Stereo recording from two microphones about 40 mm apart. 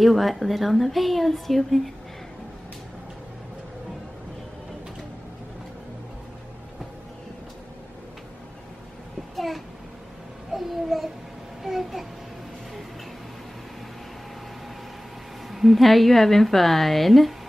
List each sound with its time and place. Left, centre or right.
0.0 s a woman's voice: centre
9.3 s a sound: centre
10.5 s babbling: centre
11.6 s a child's voice: centre
15.5 s a woman's voice: centre